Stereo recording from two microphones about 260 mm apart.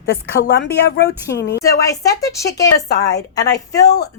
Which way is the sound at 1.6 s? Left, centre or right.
Centre.